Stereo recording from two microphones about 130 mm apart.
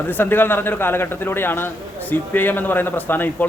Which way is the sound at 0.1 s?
15° left (ahead or behind).